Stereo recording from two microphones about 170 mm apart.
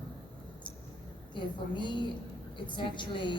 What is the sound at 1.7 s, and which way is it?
A man's voice, 25° left (ahead or behind).